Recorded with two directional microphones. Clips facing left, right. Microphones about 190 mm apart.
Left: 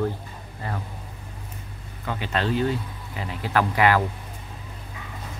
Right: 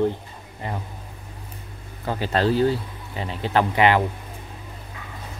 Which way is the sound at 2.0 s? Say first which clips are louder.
Right 5 dB; 35° right (ahead or behind).